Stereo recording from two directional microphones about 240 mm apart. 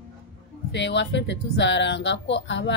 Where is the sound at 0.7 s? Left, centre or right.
Left.